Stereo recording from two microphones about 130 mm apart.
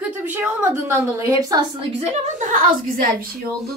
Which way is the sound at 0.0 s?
15° right (ahead or behind).